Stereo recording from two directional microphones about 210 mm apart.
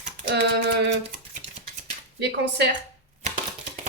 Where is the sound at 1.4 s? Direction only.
35° right (ahead or behind).